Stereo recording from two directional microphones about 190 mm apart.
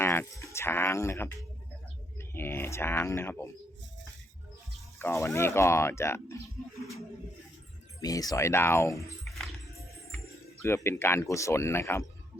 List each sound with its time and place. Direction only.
0.0 s speech: 15° left (ahead or behind)
4.9 s speech: 15° left (ahead or behind)
8.0 s speech: 20° left (ahead or behind)
9.2 s music: centre (ahead or behind)
10.8 s speech: 15° left (ahead or behind)